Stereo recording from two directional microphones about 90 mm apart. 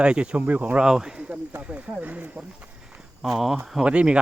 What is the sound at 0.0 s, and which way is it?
Speech, 10° right (ahead or behind).